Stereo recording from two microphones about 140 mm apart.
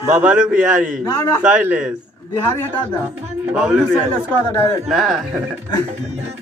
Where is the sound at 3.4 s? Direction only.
5° right (ahead or behind).